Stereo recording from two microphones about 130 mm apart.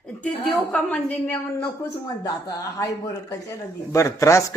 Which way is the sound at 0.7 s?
10° left (ahead or behind).